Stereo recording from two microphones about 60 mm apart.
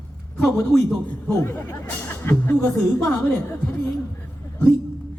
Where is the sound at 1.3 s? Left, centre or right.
Left.